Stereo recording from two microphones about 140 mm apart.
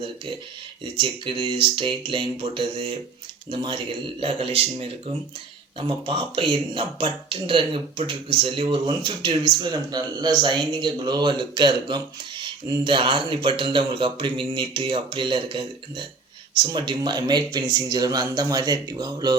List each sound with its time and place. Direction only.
0.9 s speech: 35° right (ahead or behind)